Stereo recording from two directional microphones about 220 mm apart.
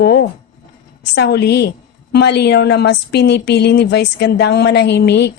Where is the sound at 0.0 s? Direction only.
50° left (ahead or behind).